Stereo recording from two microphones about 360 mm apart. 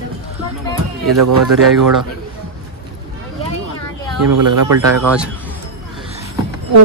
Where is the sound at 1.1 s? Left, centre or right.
Right.